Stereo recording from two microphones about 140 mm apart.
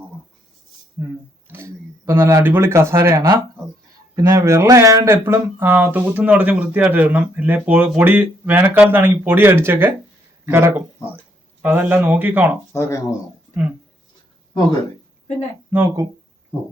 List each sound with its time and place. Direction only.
1.5 s speech: 20° right (ahead or behind)
12.7 s speech: 20° left (ahead or behind)
15.7 s speech: 15° right (ahead or behind)